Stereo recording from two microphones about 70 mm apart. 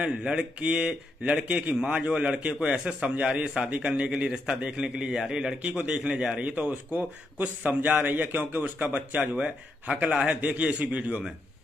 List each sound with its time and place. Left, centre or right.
0.0 s a man's voice: centre